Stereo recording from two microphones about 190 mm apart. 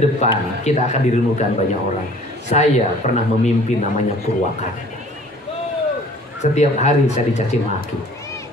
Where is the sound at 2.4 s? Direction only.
35° left (ahead or behind).